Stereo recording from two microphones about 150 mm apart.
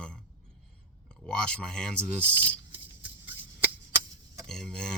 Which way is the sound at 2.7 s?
10° right (ahead or behind).